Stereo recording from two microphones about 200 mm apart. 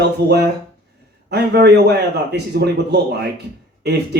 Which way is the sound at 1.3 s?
55° right (ahead or behind).